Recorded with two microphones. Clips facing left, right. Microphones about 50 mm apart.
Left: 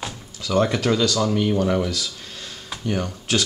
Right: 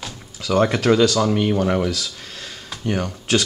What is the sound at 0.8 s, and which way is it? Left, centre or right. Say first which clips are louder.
Speech: right 4 dB; centre.